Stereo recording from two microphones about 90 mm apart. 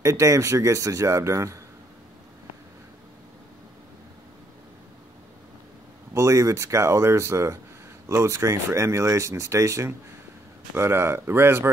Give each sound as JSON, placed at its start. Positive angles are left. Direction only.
{"t": 0.0, "sound": "speech", "side_deg": -35}
{"t": 6.1, "sound": "speech", "side_deg": -35}